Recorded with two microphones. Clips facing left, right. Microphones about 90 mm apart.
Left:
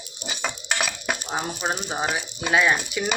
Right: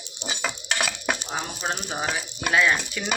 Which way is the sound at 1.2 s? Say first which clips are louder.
Left 3 dB; 10° left (ahead or behind).